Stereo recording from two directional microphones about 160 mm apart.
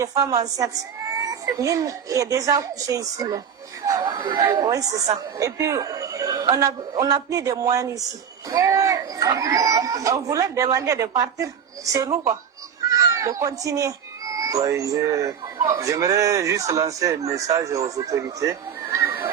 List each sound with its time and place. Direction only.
0.0 s a woman's voice: 20° right (ahead or behind)